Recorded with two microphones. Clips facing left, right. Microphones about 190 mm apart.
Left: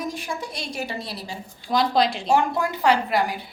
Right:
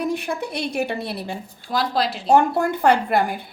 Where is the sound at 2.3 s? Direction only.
50° right (ahead or behind).